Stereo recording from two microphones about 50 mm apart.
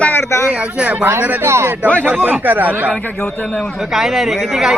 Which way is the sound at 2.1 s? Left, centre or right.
Right.